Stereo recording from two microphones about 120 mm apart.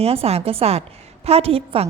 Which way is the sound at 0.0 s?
55° right (ahead or behind).